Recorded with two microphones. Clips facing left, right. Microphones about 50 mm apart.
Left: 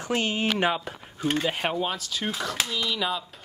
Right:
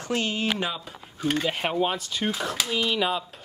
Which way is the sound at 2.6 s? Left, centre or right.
Right.